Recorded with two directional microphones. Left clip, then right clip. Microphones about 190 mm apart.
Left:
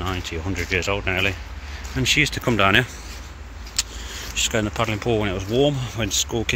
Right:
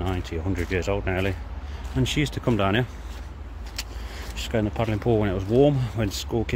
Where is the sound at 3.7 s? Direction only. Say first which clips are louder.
Left 9 dB; 20° right (ahead or behind).